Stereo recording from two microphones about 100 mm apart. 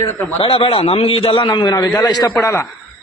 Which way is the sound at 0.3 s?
70° left (ahead or behind).